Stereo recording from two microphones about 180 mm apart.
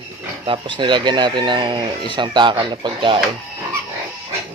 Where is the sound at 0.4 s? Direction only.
25° right (ahead or behind).